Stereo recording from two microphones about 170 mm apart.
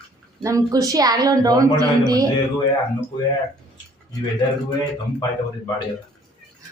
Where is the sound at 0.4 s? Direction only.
20° right (ahead or behind).